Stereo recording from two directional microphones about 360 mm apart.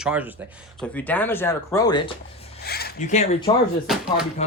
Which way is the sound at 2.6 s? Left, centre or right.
Left.